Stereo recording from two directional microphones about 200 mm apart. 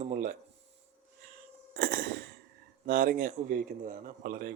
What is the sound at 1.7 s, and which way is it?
Speech, 50° right (ahead or behind).